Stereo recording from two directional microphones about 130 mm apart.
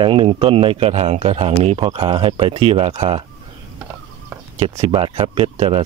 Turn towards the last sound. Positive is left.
turn(degrees=-50)  # may be behind; listen again after turning